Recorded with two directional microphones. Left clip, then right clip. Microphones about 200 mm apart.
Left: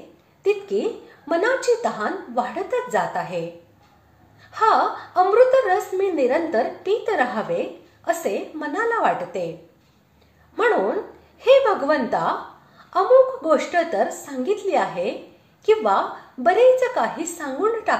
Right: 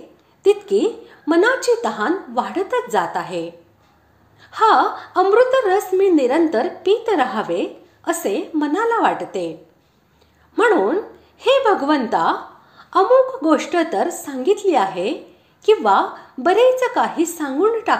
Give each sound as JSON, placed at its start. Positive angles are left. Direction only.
{"t": 0.4, "sound": "a sound", "side_deg": -35}
{"t": 1.3, "sound": "a woman's voice", "side_deg": -30}
{"t": 4.5, "sound": "a woman's voice", "side_deg": -30}
{"t": 11.3, "sound": "a woman's voice", "side_deg": -35}